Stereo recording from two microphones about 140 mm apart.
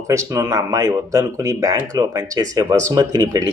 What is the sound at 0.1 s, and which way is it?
Speech, 20° right (ahead or behind).